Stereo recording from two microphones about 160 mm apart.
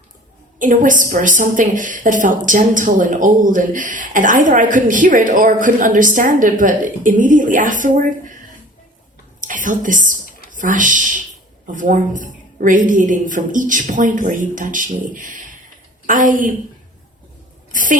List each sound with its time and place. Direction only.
0.6 s a woman's voice: 55° right (ahead or behind)
9.4 s a woman's voice: 55° right (ahead or behind)
17.7 s a sound: 55° right (ahead or behind)